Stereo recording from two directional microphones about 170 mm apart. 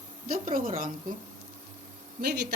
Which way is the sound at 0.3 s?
55° right (ahead or behind).